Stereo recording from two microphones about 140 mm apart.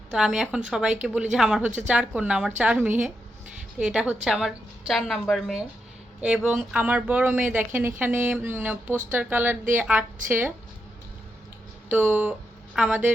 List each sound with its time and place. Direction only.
0.1 s a woman's voice: 5° right (ahead or behind)
11.9 s speech: 15° right (ahead or behind)